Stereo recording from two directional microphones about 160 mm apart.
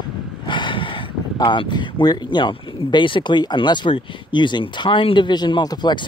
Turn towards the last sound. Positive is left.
turn(degrees=30)  # may be behind; listen again after turning